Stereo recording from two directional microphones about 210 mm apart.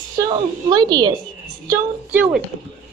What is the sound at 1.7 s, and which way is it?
Speech, 10° right (ahead or behind).